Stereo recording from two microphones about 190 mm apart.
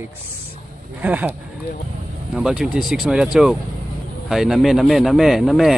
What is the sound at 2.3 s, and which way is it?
Speech, 5° right (ahead or behind).